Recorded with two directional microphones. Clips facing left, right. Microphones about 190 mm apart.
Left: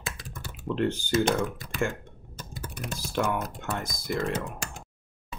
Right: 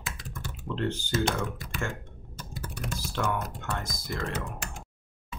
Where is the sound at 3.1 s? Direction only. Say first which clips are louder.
Left 3 dB; 15° left (ahead or behind).